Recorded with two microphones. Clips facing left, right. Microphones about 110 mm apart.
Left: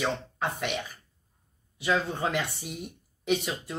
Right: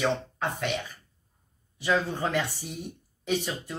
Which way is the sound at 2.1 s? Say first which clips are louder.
Right 1 dB; 15° left (ahead or behind).